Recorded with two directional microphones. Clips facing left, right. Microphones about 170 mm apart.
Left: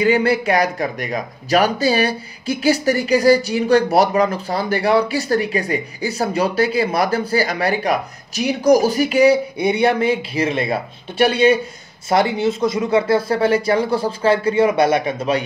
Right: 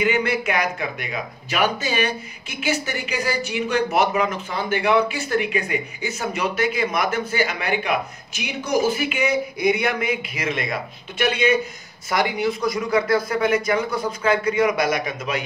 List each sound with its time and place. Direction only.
0.0 s speech: 35° left (ahead or behind)